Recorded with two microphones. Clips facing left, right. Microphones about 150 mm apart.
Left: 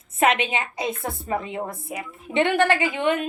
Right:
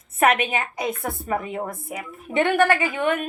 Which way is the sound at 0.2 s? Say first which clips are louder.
Right 1 dB; 25° left (ahead or behind).